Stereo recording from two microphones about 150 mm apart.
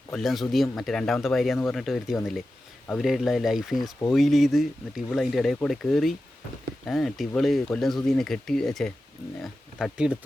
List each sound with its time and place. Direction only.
0.2 s speech: centre (ahead or behind)